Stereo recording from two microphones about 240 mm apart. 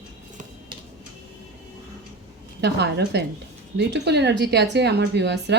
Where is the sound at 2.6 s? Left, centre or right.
Right.